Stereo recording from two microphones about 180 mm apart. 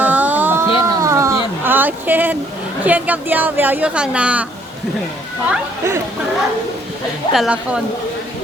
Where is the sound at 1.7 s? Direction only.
10° right (ahead or behind).